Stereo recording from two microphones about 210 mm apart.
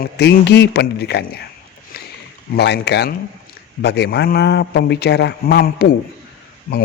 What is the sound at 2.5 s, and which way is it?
Speech, 50° left (ahead or behind).